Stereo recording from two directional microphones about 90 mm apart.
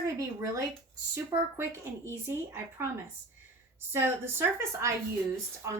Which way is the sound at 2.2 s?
30° right (ahead or behind).